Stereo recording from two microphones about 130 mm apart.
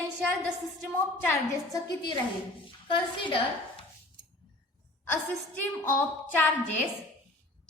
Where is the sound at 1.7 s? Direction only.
30° left (ahead or behind).